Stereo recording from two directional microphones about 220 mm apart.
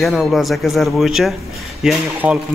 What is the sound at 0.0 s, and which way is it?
Speech, centre (ahead or behind).